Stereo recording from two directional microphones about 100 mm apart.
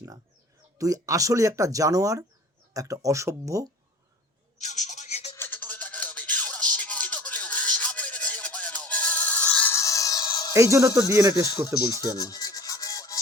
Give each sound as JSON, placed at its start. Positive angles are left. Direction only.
{"t": 0.8, "sound": "speech", "side_deg": -35}
{"t": 5.4, "sound": "music", "side_deg": 15}
{"t": 9.7, "sound": "a sound", "side_deg": 30}
{"t": 10.5, "sound": "speech", "side_deg": -30}
{"t": 11.4, "sound": "rub", "side_deg": 35}